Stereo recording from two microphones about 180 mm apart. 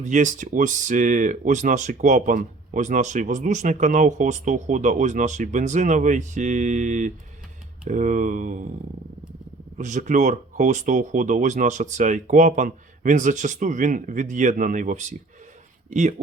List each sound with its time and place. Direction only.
0.0 s speech: 45° right (ahead or behind)
9.7 s speech: 40° right (ahead or behind)